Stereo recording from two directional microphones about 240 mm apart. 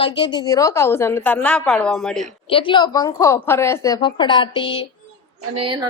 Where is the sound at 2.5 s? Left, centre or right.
Left.